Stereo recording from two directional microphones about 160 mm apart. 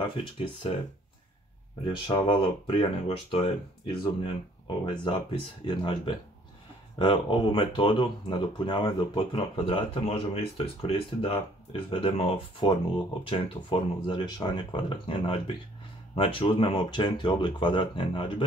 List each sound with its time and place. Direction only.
0.0 s speech: 30° left (ahead or behind)
1.9 s speech: 30° left (ahead or behind)